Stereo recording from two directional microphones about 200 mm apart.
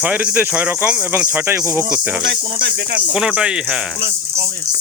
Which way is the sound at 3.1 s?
5° right (ahead or behind).